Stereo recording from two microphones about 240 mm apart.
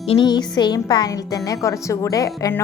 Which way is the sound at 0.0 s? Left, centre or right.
Left.